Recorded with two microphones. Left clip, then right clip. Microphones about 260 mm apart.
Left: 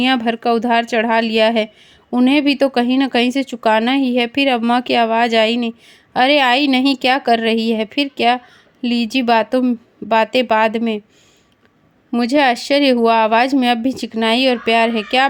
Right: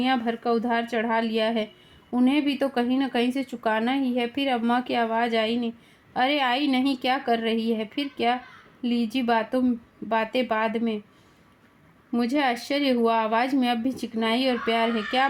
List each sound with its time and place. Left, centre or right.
0.0 s a woman's voice: left
12.1 s a woman's voice: left